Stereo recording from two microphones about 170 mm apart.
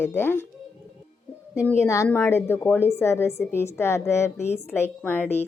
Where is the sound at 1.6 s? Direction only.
15° left (ahead or behind).